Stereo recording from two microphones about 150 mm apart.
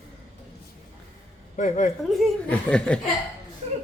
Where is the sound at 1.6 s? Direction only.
55° left (ahead or behind).